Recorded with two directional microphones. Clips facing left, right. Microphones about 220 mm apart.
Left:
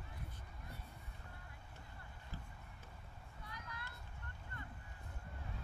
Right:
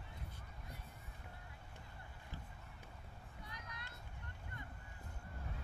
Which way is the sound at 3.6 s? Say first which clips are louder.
Left 2 dB; 20° right (ahead or behind).